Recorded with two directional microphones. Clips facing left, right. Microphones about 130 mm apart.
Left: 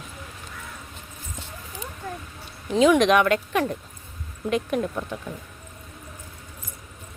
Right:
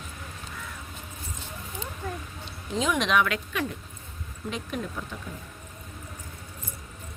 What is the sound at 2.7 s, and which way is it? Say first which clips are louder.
Speech: left 8 dB; 70° left (ahead or behind).